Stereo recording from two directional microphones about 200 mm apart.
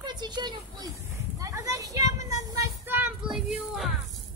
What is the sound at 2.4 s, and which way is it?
Child singing, 15° right (ahead or behind).